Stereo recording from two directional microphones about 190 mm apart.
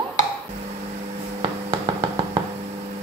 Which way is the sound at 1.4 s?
30° right (ahead or behind).